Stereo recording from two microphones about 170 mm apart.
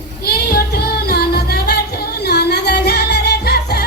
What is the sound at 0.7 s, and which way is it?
Music, 65° left (ahead or behind).